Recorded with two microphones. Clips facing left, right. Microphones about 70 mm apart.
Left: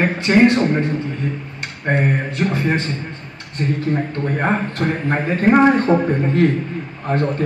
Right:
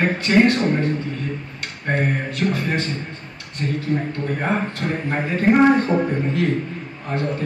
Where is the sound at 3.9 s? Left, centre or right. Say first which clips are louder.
Left 2 dB; left.